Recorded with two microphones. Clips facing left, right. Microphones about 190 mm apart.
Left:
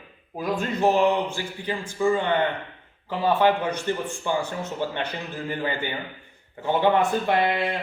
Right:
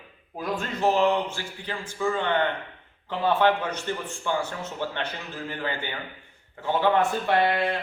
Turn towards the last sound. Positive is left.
turn(degrees=10)  # may be behind; listen again after turning